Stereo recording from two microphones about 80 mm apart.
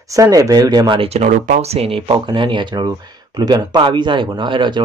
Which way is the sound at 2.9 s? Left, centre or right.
Right.